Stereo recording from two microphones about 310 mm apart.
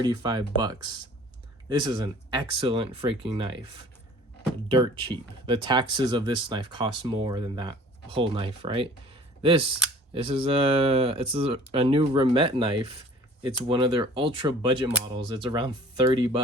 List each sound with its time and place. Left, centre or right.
0.0 s speech: centre
4.7 s speech: centre